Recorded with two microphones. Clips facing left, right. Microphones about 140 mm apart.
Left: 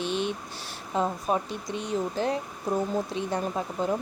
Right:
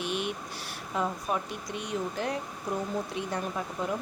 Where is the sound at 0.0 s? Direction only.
30° left (ahead or behind).